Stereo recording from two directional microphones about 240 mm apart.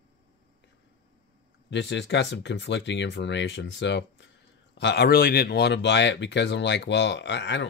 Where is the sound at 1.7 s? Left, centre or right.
Left.